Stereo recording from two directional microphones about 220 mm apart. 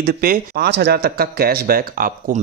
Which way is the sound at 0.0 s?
40° right (ahead or behind).